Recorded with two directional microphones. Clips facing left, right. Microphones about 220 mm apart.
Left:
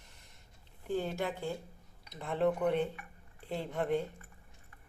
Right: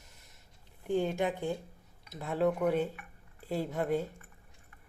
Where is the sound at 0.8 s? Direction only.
15° right (ahead or behind).